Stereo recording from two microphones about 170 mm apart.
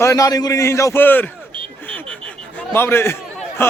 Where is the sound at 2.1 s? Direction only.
10° left (ahead or behind).